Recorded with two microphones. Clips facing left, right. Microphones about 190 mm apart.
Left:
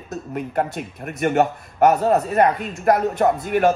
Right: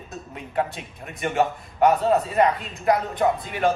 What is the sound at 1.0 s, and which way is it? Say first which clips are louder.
Speech: left 4 dB; 60° left (ahead or behind).